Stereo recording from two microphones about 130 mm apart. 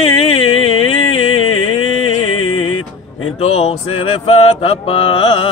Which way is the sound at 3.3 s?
55° left (ahead or behind).